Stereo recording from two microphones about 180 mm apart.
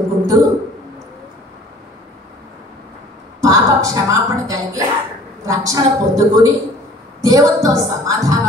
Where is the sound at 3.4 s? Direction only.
20° right (ahead or behind).